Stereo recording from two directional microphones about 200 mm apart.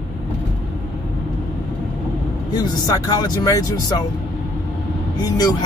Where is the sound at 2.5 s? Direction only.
20° left (ahead or behind).